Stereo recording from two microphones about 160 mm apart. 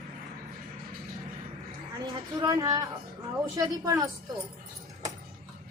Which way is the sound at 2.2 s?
25° right (ahead or behind).